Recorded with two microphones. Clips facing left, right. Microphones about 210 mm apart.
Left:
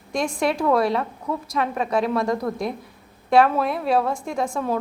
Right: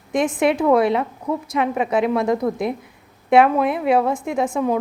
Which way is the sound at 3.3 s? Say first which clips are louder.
Right 3 dB; 20° right (ahead or behind).